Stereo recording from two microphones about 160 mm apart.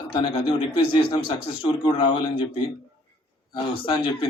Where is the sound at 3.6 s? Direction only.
30° left (ahead or behind).